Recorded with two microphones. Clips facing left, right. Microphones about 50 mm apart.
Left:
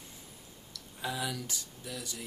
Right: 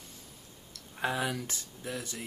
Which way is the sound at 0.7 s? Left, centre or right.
Right.